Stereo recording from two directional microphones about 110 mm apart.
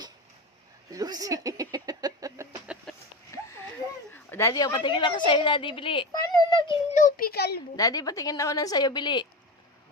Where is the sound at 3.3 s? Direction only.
30° left (ahead or behind).